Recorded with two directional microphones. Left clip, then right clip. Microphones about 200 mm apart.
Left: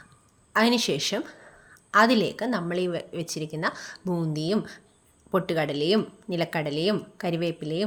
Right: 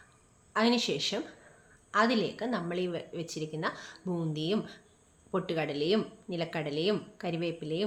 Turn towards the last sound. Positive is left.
turn(degrees=40)  # may be behind; listen again after turning